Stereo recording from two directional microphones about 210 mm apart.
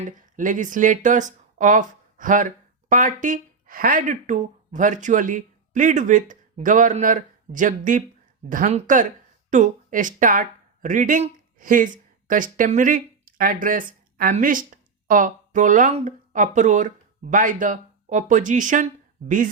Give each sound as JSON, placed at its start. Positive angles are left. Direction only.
{"t": 0.0, "sound": "speech", "side_deg": -40}